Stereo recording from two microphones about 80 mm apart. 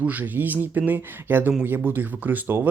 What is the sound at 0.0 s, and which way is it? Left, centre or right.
Speech, right.